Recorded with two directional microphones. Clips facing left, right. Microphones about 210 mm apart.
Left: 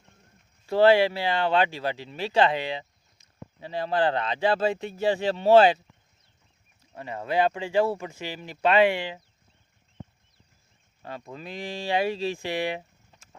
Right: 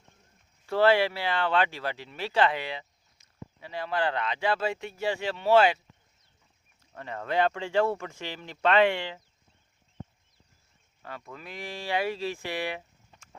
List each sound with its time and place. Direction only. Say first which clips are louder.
0.6 s speech: left 4 dB; 15° left (ahead or behind); by 5.8 s 35° left (ahead or behind)
6.9 s speech: left 2 dB; 10° left (ahead or behind)
11.0 s speech: left 4 dB; 20° left (ahead or behind)